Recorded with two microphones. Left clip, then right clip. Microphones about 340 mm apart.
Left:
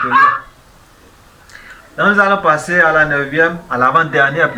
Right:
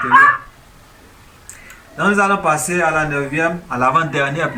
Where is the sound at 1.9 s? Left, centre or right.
Centre.